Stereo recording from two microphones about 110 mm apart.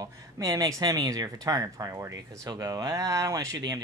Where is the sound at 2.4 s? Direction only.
40° right (ahead or behind).